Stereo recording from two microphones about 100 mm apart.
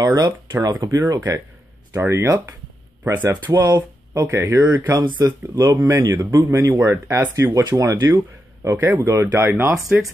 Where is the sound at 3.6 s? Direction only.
40° right (ahead or behind).